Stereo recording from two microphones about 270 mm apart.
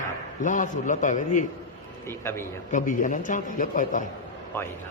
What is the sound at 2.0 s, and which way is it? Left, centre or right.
Speech, centre.